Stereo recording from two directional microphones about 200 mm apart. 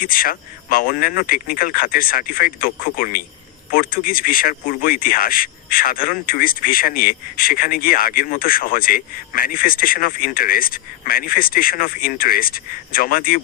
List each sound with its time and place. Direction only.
0.0 s speech: 45° left (ahead or behind)